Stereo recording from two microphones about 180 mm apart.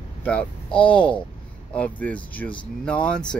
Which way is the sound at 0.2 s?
5° left (ahead or behind).